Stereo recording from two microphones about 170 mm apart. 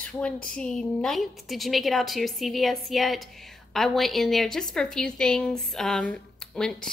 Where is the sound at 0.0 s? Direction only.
5° left (ahead or behind).